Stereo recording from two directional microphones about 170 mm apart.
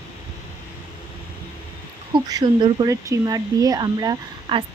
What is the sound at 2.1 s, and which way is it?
Speech, 25° right (ahead or behind).